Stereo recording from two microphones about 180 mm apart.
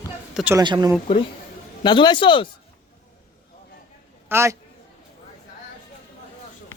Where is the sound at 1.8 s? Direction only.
25° left (ahead or behind).